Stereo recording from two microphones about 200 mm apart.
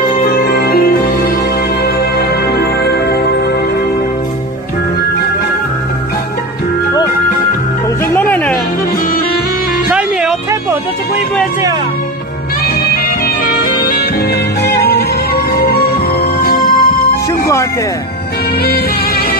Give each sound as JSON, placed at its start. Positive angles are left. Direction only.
{"t": 0.1, "sound": "music", "side_deg": 45}
{"t": 8.1, "sound": "music", "side_deg": 10}
{"t": 13.5, "sound": "music", "side_deg": 50}
{"t": 18.6, "sound": "music", "side_deg": 50}